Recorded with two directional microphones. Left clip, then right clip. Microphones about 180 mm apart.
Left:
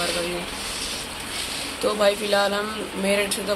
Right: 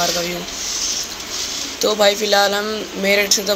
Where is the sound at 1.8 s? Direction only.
20° right (ahead or behind).